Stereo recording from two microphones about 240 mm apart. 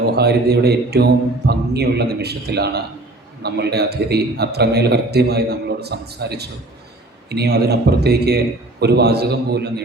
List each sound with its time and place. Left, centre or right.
0.0 s a man's voice: right